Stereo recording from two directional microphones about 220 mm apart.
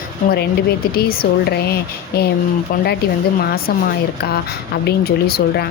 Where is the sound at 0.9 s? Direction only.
45° left (ahead or behind).